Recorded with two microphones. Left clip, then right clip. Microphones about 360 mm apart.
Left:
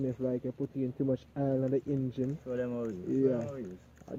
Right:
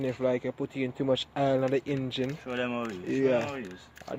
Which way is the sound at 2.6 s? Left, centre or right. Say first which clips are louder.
Right 4 dB; centre.